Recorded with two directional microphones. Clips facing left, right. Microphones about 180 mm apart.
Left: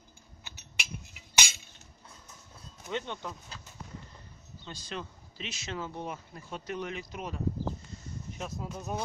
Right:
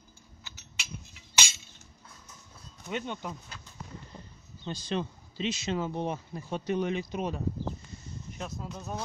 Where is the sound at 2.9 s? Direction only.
10° right (ahead or behind).